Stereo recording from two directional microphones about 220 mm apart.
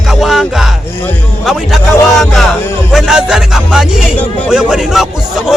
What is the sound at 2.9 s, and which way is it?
A man's voice, 5° right (ahead or behind).